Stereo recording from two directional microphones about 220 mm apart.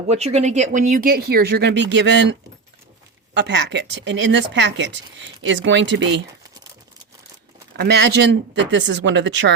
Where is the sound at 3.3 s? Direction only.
50° right (ahead or behind).